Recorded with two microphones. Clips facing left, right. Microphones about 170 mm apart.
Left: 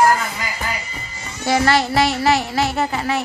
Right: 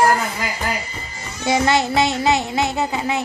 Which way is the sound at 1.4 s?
20° right (ahead or behind).